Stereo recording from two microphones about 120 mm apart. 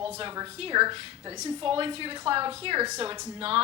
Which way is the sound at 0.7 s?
35° right (ahead or behind).